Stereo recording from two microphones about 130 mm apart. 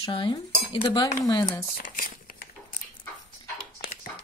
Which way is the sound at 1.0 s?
25° left (ahead or behind).